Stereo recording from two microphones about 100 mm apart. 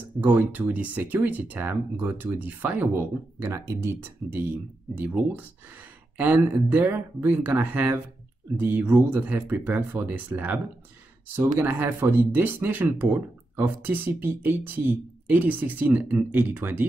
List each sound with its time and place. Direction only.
0.2 s speech: 15° right (ahead or behind)
11.6 s speech: 20° right (ahead or behind)